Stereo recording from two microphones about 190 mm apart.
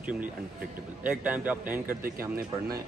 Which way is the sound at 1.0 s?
10° right (ahead or behind).